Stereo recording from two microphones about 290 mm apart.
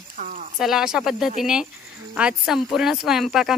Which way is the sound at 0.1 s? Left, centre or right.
Right.